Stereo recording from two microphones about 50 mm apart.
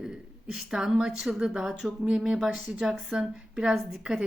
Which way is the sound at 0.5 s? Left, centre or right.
Centre.